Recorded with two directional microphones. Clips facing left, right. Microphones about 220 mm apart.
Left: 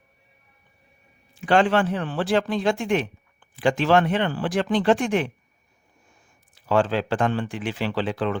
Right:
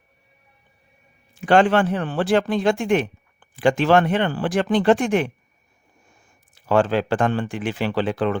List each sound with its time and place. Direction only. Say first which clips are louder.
1.5 s speech: right 3 dB; 50° right (ahead or behind)
6.5 s speech: right 3 dB; 55° right (ahead or behind)